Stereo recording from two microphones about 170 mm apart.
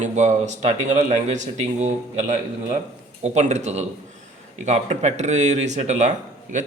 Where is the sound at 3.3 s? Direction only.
40° right (ahead or behind).